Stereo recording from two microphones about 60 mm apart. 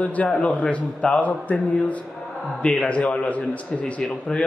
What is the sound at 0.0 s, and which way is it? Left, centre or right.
A man's voice, left.